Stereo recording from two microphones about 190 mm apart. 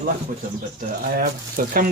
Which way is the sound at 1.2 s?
50° right (ahead or behind).